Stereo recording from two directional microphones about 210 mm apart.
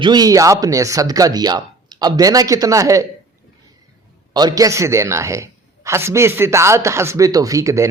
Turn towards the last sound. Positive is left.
turn(degrees=-15)  # may be behind; listen again after turning